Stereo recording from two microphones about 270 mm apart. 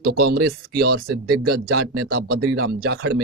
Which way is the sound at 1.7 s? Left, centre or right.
Right.